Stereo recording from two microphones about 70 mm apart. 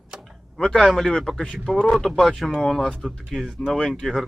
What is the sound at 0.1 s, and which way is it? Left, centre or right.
Door, centre.